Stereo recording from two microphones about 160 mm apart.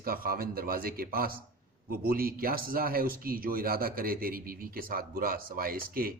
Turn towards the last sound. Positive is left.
turn(degrees=-65)  # may be behind; listen again after turning